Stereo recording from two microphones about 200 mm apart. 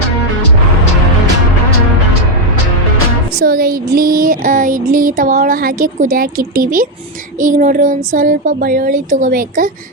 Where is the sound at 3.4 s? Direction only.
50° right (ahead or behind).